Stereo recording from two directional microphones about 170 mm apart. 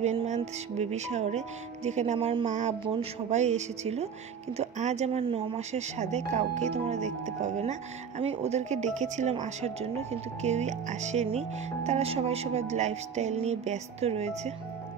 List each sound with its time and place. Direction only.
0.0 s speech: 40° right (ahead or behind)